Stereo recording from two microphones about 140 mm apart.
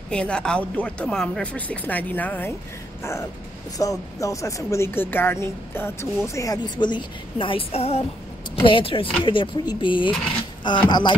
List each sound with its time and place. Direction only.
0.1 s speech: 5° left (ahead or behind)
3.0 s vehicle: 20° left (ahead or behind)
3.7 s speech: 25° left (ahead or behind)